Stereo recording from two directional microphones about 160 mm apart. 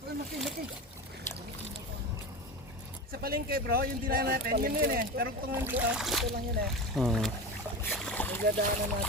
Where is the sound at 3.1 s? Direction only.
70° right (ahead or behind).